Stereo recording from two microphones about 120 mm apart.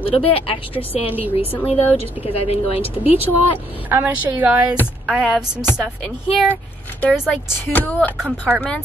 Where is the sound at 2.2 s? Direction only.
55° left (ahead or behind).